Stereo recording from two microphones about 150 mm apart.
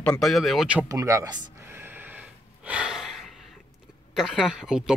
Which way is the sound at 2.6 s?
5° right (ahead or behind).